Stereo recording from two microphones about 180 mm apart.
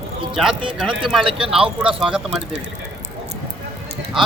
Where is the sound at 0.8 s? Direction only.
Centre (ahead or behind).